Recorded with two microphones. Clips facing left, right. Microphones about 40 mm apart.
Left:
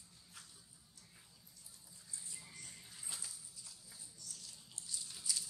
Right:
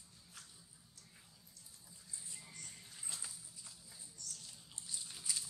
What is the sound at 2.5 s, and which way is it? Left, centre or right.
Music, centre.